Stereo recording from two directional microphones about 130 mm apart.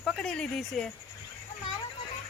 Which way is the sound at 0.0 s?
5° left (ahead or behind).